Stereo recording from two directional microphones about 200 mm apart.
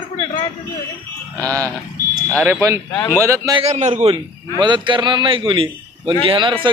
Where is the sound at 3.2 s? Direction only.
15° right (ahead or behind).